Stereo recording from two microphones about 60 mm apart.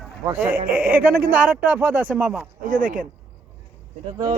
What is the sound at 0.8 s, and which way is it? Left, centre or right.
Speech, right.